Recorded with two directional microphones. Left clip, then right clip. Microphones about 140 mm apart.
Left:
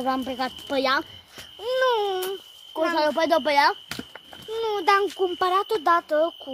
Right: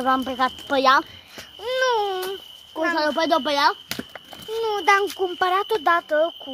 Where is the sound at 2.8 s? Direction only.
25° left (ahead or behind).